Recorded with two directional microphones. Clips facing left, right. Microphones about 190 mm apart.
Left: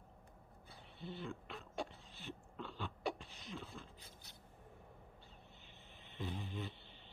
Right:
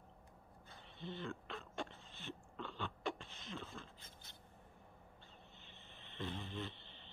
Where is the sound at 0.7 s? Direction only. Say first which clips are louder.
Right 1 dB; 5° left (ahead or behind).